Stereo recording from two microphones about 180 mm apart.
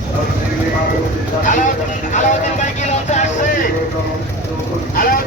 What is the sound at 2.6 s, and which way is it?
Vehicle, 40° left (ahead or behind).